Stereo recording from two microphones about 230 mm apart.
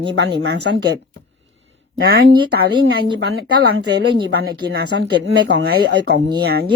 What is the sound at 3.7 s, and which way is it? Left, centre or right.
Speech, right.